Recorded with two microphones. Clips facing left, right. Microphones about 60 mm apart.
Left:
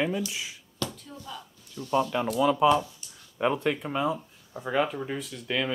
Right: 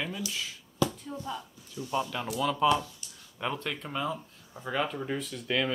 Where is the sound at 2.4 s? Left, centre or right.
Centre.